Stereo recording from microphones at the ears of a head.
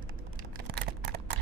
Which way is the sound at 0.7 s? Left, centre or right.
Right.